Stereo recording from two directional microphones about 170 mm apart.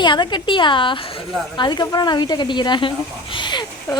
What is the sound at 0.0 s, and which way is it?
A woman's voice, 25° left (ahead or behind).